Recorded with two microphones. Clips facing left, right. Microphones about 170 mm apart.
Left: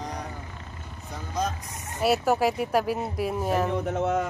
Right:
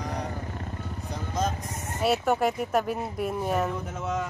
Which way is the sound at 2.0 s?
5° left (ahead or behind).